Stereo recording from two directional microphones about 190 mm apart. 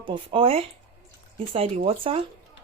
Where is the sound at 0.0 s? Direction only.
25° right (ahead or behind).